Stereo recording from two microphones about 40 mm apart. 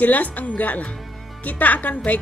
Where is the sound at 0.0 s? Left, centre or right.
Left.